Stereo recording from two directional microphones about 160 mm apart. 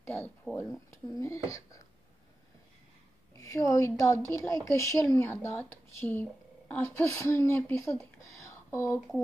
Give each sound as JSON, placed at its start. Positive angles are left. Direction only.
{"t": 0.0, "sound": "speech", "side_deg": 15}
{"t": 3.3, "sound": "speech", "side_deg": 20}
{"t": 8.3, "sound": "a sound", "side_deg": 20}